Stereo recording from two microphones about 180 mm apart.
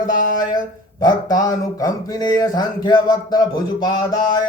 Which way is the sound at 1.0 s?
20° left (ahead or behind).